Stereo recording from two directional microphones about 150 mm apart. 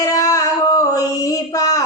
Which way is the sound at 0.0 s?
25° left (ahead or behind).